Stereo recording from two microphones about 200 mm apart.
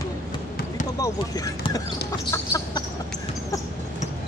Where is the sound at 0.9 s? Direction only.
15° left (ahead or behind).